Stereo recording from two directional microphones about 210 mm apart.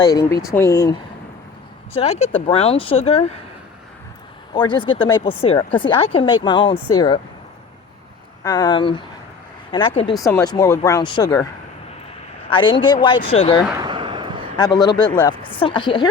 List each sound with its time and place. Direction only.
0.0 s speech: 15° left (ahead or behind)
1.9 s speech: 30° left (ahead or behind)
4.5 s speech: 20° left (ahead or behind)
8.4 s speech: 20° left (ahead or behind)
12.5 s speech: 25° left (ahead or behind)
13.7 s a sound: 20° right (ahead or behind)
14.5 s speech: 20° left (ahead or behind)